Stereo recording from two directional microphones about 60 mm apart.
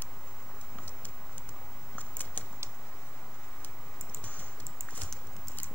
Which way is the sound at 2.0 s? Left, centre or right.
Left.